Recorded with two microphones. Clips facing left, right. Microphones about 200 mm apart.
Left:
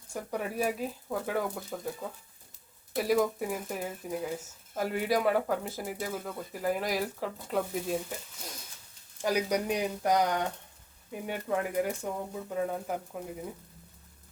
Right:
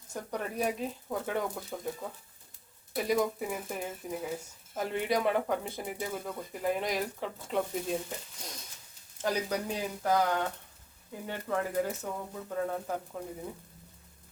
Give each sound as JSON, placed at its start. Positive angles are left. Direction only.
{"t": 0.1, "sound": "speech", "side_deg": 5}
{"t": 2.9, "sound": "speech", "side_deg": 0}
{"t": 8.4, "sound": "a sound", "side_deg": 5}
{"t": 9.2, "sound": "speech", "side_deg": 15}